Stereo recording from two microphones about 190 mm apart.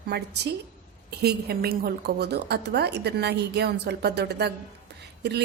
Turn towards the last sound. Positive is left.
turn(degrees=-60)  # may be behind; listen again after turning